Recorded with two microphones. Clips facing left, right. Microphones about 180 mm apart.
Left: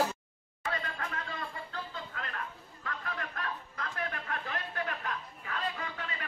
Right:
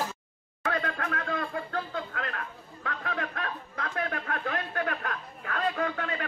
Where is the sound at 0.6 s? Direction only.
60° right (ahead or behind).